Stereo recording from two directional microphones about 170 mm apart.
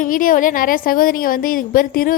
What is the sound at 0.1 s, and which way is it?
A woman's voice, 55° left (ahead or behind).